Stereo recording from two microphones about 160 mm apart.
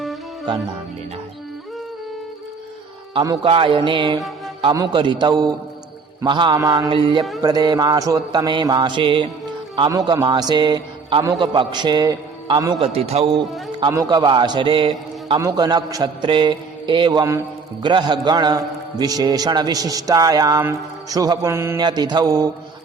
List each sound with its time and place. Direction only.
3.2 s a man's voice: 35° right (ahead or behind)
12.9 s speech: 40° right (ahead or behind)
13.7 s a man's voice: 25° right (ahead or behind)